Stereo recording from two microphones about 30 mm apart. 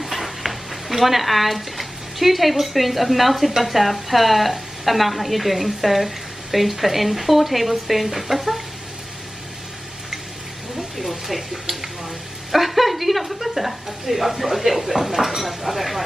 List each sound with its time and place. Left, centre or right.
0.0 s speech: centre
11.0 s a woman's voice: centre